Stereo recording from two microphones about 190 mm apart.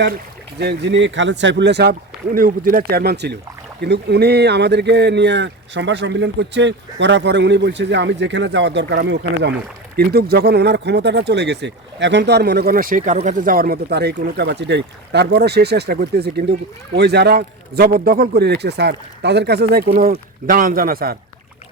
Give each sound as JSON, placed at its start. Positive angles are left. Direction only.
{"t": 0.6, "sound": "speech", "side_deg": -65}